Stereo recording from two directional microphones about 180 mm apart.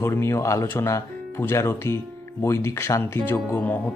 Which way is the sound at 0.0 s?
15° left (ahead or behind).